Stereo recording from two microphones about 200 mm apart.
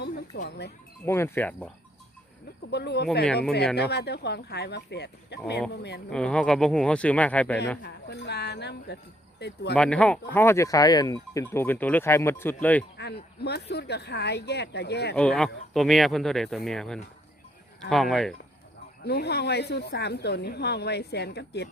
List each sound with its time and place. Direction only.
0.0 s sheep: 55° left (ahead or behind)
1.0 s speech: 10° left (ahead or behind)
2.6 s a woman's voice: 55° left (ahead or behind)
6.1 s speech: 5° left (ahead or behind)
7.8 s a woman's voice: 55° left (ahead or behind)
9.7 s speech: 5° left (ahead or behind)
13.0 s a woman's voice: 55° left (ahead or behind)
15.1 s speech: 5° left (ahead or behind)
19.0 s a woman's voice: 55° left (ahead or behind)